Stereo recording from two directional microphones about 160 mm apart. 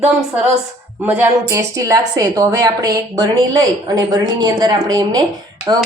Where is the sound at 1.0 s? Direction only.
10° right (ahead or behind).